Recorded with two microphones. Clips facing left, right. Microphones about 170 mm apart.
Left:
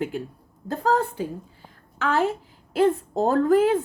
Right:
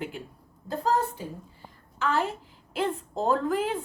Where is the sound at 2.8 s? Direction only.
45° left (ahead or behind).